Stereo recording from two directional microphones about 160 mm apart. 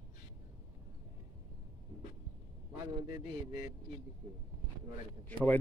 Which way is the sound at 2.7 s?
20° right (ahead or behind).